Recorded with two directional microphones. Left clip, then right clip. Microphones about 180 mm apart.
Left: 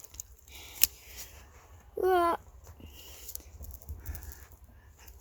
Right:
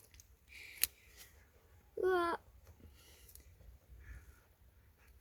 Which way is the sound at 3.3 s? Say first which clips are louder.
Left 17 dB; 15° left (ahead or behind).